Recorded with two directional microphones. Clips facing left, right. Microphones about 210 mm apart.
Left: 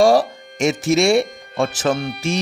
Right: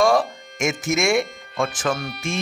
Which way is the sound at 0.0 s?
35° left (ahead or behind).